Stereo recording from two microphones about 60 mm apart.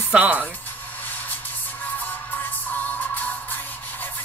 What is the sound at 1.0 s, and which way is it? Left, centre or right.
Spray, left.